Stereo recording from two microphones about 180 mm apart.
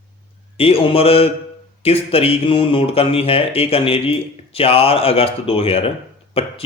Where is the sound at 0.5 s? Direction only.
30° left (ahead or behind).